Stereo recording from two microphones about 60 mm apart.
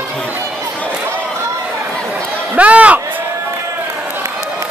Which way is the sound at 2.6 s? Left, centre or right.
Right.